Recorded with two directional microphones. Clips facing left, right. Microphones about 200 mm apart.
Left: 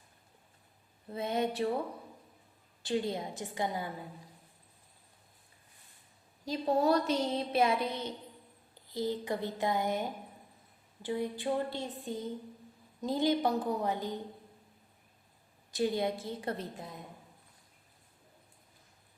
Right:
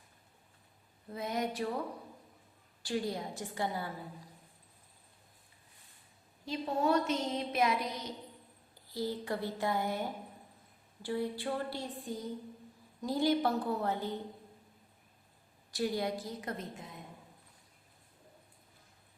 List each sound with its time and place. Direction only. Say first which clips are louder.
1.1 s a woman's voice: left 3 dB; 25° left (ahead or behind)
2.8 s a woman's voice: left 2 dB; 25° left (ahead or behind)
6.4 s a woman's voice: left 4 dB; 40° left (ahead or behind); by 14.2 s 15° left (ahead or behind)
15.7 s a woman's voice: left 3 dB; 25° left (ahead or behind)